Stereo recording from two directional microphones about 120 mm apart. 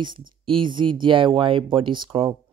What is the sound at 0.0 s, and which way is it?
Speech, 40° right (ahead or behind).